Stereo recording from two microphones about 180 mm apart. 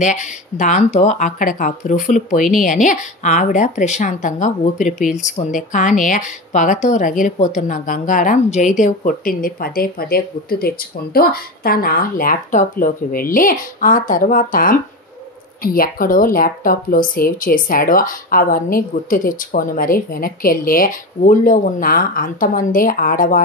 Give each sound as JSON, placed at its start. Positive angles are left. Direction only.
{"t": 0.0, "sound": "a woman's voice", "side_deg": 45}